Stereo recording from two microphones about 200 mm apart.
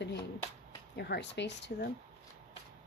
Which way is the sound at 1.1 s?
60° left (ahead or behind).